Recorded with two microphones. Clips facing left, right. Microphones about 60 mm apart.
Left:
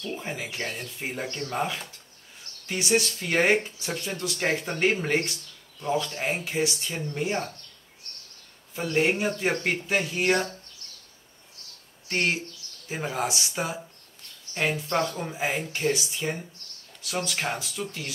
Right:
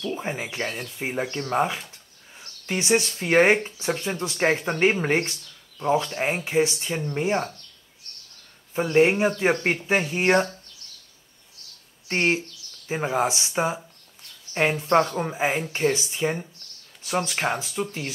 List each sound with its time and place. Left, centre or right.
0.1 s speech: right
8.7 s speech: right
12.1 s speech: right